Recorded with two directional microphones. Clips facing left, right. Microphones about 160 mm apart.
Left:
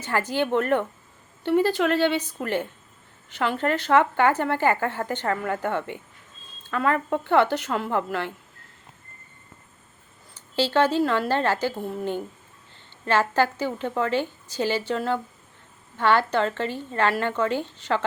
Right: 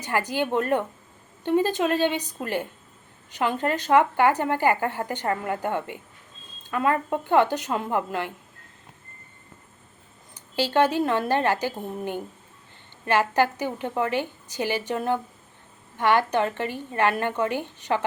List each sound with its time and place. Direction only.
0.0 s speech: 15° right (ahead or behind)
10.3 s speech: 15° right (ahead or behind)